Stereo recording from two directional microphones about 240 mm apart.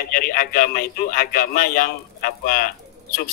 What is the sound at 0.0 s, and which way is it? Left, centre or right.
A man's voice, left.